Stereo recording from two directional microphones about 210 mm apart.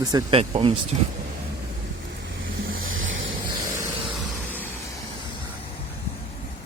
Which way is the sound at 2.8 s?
70° right (ahead or behind).